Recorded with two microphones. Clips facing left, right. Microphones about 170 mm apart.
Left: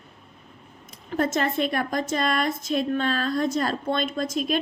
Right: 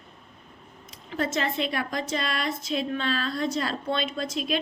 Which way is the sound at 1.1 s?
50° left (ahead or behind).